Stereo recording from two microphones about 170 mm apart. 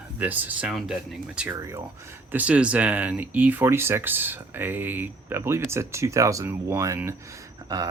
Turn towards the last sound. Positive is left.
turn(degrees=-20)  # may be behind; listen again after turning